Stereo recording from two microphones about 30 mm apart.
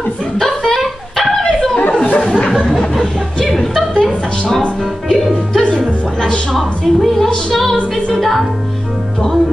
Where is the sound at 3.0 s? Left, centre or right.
Left.